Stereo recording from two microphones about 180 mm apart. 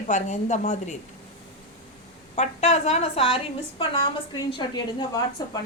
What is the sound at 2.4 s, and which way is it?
A woman's voice, 35° left (ahead or behind).